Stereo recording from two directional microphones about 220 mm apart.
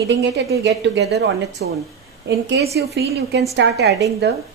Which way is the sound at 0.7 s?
50° right (ahead or behind).